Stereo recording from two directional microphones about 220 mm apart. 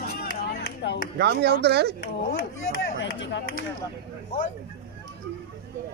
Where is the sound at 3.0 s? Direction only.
55° left (ahead or behind).